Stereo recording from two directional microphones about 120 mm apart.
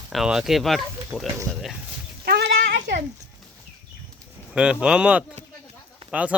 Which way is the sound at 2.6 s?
90° right.